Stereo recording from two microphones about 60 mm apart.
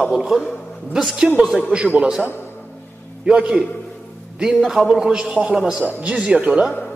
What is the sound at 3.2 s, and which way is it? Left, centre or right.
Speech, centre.